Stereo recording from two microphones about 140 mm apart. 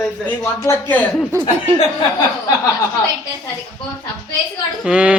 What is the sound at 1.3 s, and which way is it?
Speech, 15° right (ahead or behind).